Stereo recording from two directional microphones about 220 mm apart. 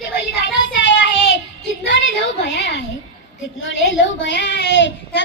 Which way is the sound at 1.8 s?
50° left (ahead or behind).